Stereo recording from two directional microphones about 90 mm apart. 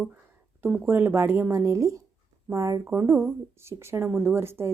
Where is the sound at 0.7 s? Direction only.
20° right (ahead or behind).